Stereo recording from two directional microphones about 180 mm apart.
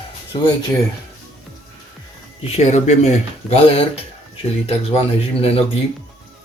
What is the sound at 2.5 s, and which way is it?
Speech, 40° left (ahead or behind).